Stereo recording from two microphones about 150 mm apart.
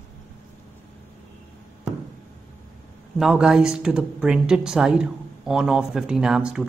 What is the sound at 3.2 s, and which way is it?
Speech, 5° right (ahead or behind).